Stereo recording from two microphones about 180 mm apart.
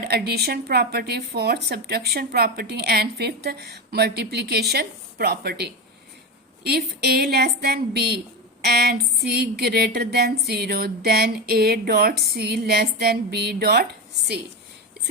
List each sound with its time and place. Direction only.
0.0 s speech: 60° right (ahead or behind)